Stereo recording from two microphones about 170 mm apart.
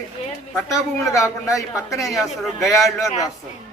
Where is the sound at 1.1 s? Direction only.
20° left (ahead or behind).